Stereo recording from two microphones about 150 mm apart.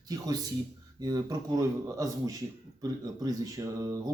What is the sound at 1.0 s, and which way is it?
A man's voice, 25° right (ahead or behind).